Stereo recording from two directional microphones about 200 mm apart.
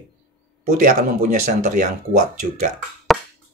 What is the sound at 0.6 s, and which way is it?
Speech, 40° right (ahead or behind).